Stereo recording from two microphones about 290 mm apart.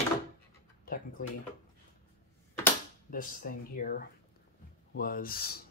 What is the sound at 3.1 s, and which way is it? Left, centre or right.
Speech, left.